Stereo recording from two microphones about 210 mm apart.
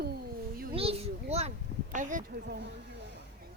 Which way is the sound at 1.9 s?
40° right (ahead or behind).